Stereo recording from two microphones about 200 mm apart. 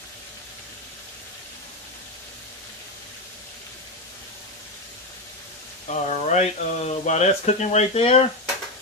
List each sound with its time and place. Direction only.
5.9 s speech: 35° left (ahead or behind)